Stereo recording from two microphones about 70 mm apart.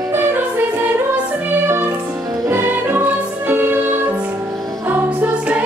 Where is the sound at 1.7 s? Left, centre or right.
Right.